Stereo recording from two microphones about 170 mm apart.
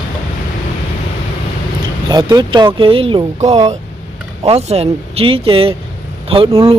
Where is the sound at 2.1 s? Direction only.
25° right (ahead or behind).